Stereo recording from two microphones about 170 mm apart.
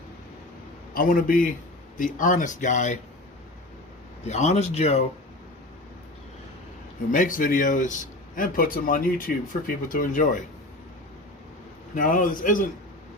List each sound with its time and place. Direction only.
0.9 s a man's voice: 55° left (ahead or behind)
4.3 s speech: 40° left (ahead or behind)
7.1 s a man's voice: 50° left (ahead or behind)
11.9 s a man's voice: 55° left (ahead or behind)